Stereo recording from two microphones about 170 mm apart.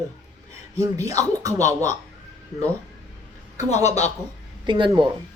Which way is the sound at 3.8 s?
40° left (ahead or behind).